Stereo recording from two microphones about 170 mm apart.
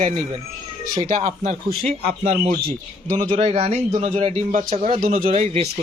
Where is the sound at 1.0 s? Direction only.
45° right (ahead or behind).